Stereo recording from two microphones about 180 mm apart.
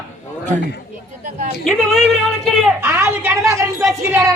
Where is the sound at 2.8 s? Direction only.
15° right (ahead or behind).